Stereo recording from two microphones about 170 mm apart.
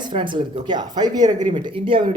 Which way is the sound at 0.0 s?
30° right (ahead or behind).